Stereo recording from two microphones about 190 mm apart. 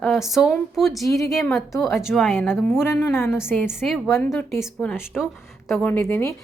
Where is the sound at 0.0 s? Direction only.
Centre (ahead or behind).